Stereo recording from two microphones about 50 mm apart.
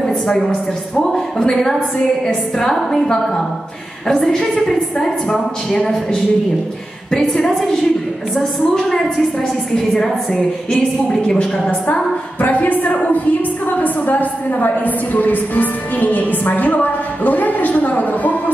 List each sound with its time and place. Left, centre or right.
0.0 s a sound: centre
1.4 s a woman's voice: centre
7.1 s a woman's voice: centre
11.9 s a woman's voice: left